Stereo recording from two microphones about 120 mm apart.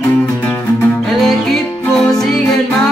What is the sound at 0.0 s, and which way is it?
Music, 15° left (ahead or behind).